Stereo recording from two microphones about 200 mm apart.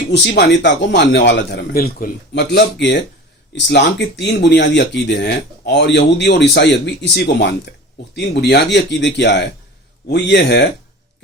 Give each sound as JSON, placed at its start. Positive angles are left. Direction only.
{"t": 0.1, "sound": "speech", "side_deg": 60}